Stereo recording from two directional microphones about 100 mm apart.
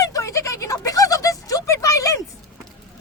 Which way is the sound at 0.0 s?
35° left (ahead or behind).